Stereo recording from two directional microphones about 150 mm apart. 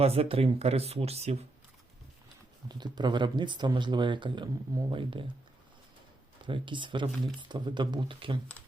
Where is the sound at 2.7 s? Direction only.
30° right (ahead or behind).